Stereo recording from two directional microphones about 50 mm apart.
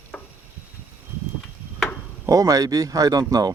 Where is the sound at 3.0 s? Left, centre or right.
Right.